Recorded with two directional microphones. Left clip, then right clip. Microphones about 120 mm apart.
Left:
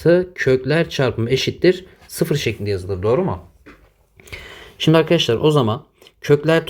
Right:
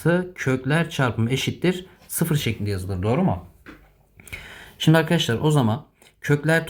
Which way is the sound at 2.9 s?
90° left.